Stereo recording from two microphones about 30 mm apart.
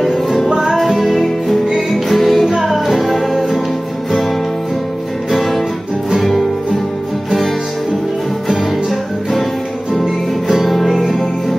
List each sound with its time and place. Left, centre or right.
0.0 s music: centre
5.3 s music: centre
10.5 s music: centre